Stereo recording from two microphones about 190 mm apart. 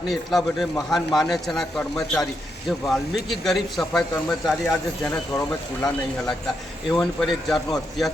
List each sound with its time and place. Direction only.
0.1 s a man's voice: centre (ahead or behind)
5.3 s speech: 15° left (ahead or behind)
6.9 s a man's voice: centre (ahead or behind)